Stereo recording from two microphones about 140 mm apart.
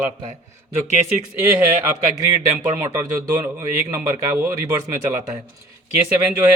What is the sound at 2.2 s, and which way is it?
A man's voice, 25° right (ahead or behind).